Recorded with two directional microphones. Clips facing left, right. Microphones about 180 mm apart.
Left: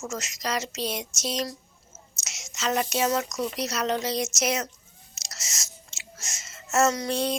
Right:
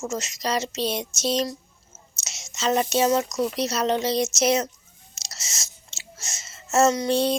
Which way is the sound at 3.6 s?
30° right (ahead or behind).